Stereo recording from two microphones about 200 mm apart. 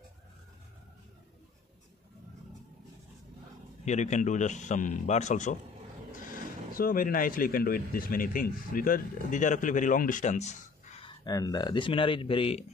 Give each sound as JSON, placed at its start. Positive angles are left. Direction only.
{"t": 3.8, "sound": "a man's voice", "side_deg": 35}
{"t": 11.1, "sound": "speech", "side_deg": 20}